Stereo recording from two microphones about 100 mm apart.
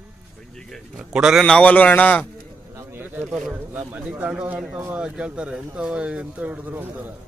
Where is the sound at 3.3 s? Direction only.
10° right (ahead or behind).